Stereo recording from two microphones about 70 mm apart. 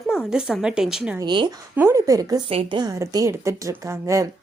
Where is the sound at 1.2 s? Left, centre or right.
Right.